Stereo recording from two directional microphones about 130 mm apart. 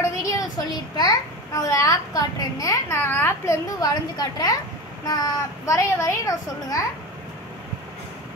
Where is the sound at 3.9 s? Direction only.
30° left (ahead or behind).